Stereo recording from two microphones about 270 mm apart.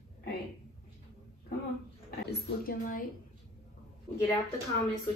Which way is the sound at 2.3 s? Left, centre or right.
Left.